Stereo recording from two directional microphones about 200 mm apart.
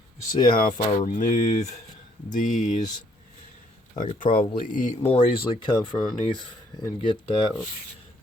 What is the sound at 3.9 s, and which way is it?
Speech, 40° left (ahead or behind).